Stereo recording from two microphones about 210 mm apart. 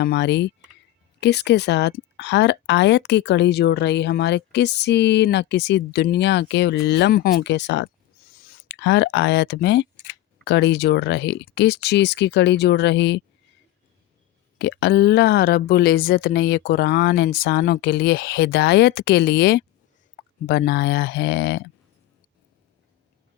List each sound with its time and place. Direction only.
0.0 s speech: 55° left (ahead or behind)
14.6 s speech: 55° left (ahead or behind)
20.2 s whispering: 55° left (ahead or behind)
20.5 s speech: 55° left (ahead or behind)